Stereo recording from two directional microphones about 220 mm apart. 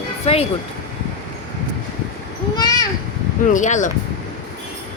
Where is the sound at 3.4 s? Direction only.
35° left (ahead or behind).